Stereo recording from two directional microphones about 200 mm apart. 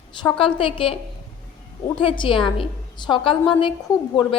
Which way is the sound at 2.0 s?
25° left (ahead or behind).